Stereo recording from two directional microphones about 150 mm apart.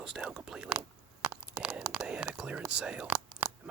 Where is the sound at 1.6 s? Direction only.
5° right (ahead or behind).